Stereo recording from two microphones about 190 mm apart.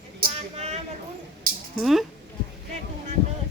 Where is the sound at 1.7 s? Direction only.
Centre (ahead or behind).